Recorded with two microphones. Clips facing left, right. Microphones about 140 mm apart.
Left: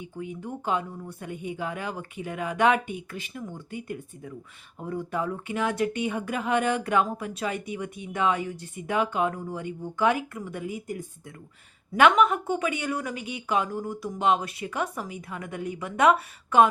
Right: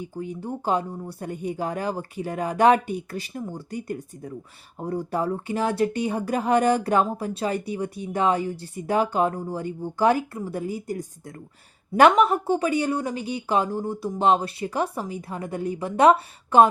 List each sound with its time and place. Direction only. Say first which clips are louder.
0.0 s speech: right 4 dB; 35° right (ahead or behind)